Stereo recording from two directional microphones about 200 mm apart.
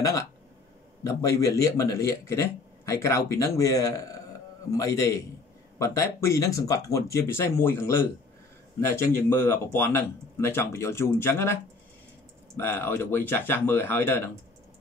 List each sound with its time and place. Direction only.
0.0 s a man's voice: 15° left (ahead or behind)